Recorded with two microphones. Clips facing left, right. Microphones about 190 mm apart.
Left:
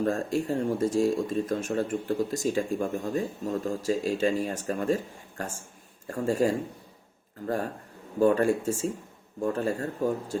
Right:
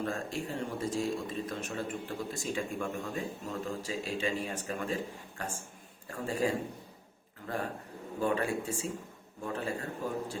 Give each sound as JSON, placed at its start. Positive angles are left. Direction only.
{"t": 0.0, "sound": "speech", "side_deg": 45}